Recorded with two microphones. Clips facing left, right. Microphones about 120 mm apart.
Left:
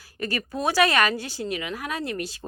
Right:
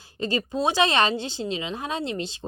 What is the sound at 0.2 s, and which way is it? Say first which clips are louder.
Speech: right 3 dB; 20° right (ahead or behind).